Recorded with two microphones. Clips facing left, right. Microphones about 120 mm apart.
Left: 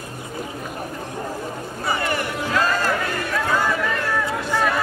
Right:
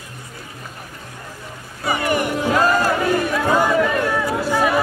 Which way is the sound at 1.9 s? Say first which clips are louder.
Right 4 dB; 15° right (ahead or behind).